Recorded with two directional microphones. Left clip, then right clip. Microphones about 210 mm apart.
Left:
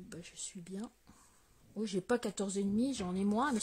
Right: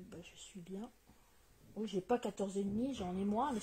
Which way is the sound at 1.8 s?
30° left (ahead or behind).